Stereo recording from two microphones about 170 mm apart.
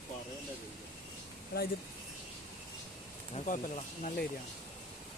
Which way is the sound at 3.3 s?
45° left (ahead or behind).